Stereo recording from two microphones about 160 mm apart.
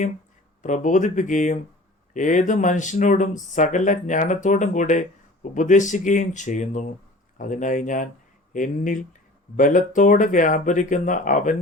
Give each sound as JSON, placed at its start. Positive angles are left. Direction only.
{"t": 0.6, "sound": "speech", "side_deg": 50}